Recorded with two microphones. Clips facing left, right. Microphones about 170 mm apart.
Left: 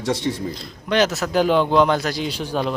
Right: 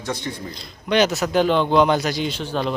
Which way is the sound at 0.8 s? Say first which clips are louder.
Right 1 dB; centre (ahead or behind).